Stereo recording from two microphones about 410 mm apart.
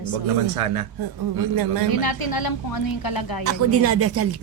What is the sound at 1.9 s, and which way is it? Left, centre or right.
A woman's voice, left.